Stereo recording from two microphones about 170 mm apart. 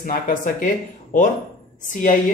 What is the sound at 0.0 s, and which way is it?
Speech, 50° left (ahead or behind).